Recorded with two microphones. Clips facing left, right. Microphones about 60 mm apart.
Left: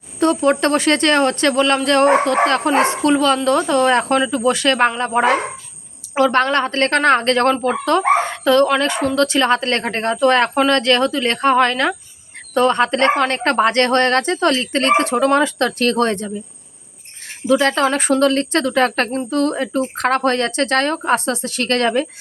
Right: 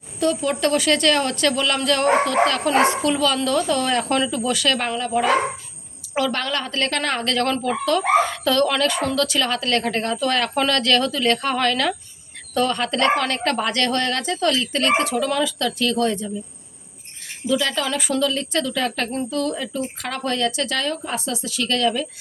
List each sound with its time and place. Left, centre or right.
0.2 s a woman's voice: left
9.1 s a woman's voice: left
17.4 s speech: left